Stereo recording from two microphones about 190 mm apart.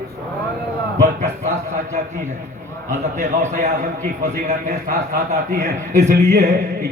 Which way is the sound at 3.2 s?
40° right (ahead or behind).